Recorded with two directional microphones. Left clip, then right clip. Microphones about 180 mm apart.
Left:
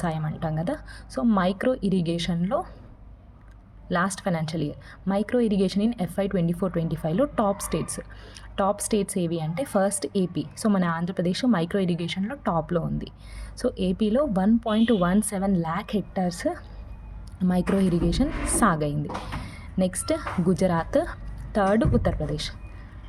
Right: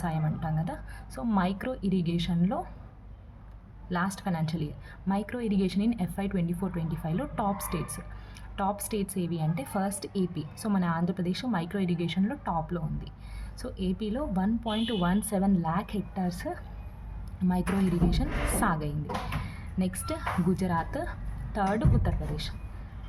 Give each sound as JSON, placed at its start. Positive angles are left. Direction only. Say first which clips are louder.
{"t": 0.0, "sound": "a woman's voice", "louder": "left 4 dB", "side_deg": 45}
{"t": 3.8, "sound": "a woman's voice", "louder": "left 6 dB", "side_deg": 45}